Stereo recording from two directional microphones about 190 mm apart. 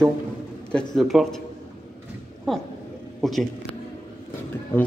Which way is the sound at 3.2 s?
Centre (ahead or behind).